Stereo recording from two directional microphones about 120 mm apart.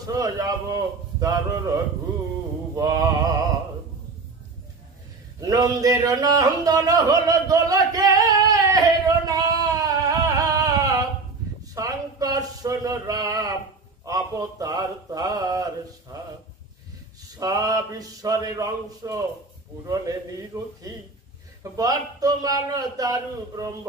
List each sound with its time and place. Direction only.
0.0 s a man's voice: 30° right (ahead or behind)
2.7 s a man's voice: 30° right (ahead or behind)
5.4 s a sound: 30° right (ahead or behind)
14.0 s a man's voice: 30° right (ahead or behind)
17.4 s a man's voice: 30° right (ahead or behind)